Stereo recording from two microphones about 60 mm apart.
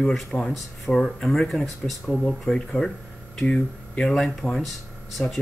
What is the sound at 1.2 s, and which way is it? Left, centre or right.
Speech, centre.